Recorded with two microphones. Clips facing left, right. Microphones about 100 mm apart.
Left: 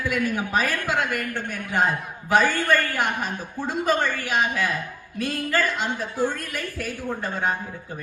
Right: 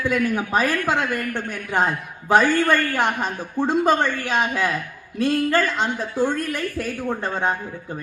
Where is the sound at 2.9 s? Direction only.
25° right (ahead or behind).